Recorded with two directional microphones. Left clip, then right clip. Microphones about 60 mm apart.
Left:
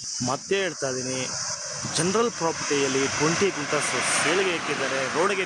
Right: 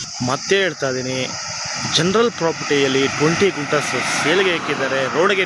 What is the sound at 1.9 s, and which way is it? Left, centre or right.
Speech, centre.